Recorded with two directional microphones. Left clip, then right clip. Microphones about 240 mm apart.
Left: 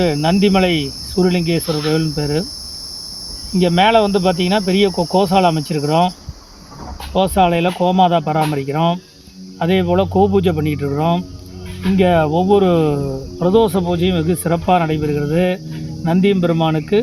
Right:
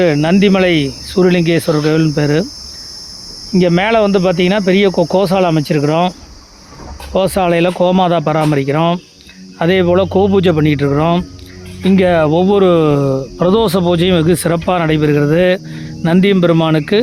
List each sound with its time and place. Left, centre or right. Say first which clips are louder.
0.0 s speech: right 4 dB; right
3.5 s speech: right 1 dB; right